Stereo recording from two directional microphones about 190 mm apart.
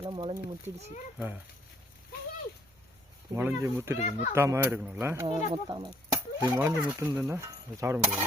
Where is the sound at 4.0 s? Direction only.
40° left (ahead or behind).